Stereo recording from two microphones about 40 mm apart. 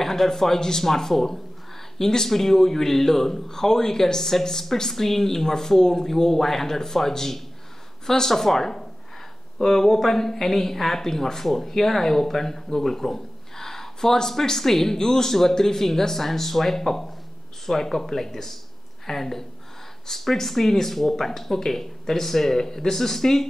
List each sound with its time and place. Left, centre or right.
0.0 s speech: centre